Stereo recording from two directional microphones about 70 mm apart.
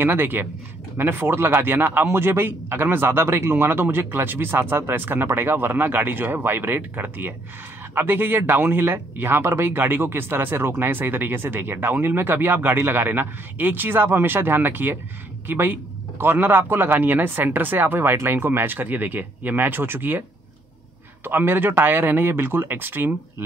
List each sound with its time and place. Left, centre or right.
0.0 s speech: right